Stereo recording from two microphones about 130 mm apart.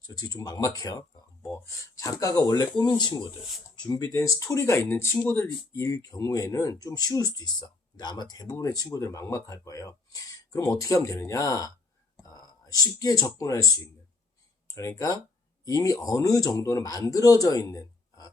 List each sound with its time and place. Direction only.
0.1 s speech: 30° left (ahead or behind)